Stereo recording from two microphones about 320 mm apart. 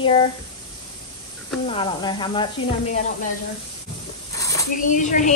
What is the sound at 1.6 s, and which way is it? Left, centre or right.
Speech, centre.